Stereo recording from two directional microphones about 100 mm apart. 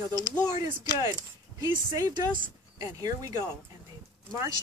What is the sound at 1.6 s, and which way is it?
Speech, 40° right (ahead or behind).